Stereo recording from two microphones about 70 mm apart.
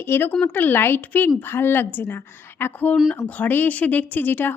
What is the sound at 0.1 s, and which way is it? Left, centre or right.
A woman's voice, left.